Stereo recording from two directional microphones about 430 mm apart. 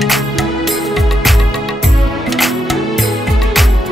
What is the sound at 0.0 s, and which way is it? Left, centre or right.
Music, centre.